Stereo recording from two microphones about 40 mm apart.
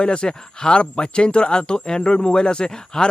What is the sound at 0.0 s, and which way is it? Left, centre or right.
Speech, left.